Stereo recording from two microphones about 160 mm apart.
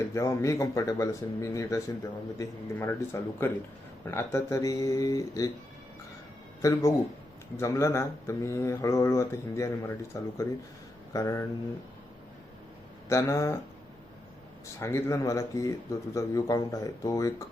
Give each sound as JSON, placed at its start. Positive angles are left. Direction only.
{"t": 0.1, "sound": "speech", "side_deg": 20}
{"t": 6.6, "sound": "speech", "side_deg": 20}
{"t": 13.1, "sound": "speech", "side_deg": 20}
{"t": 14.8, "sound": "speech", "side_deg": 15}